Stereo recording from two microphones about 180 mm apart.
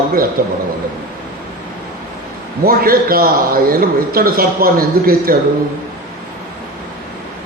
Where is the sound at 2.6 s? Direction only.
55° right (ahead or behind).